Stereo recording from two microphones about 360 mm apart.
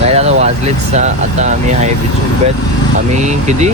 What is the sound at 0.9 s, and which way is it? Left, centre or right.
Speech, centre.